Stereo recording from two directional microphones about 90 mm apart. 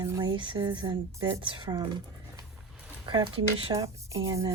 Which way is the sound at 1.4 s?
60° right (ahead or behind).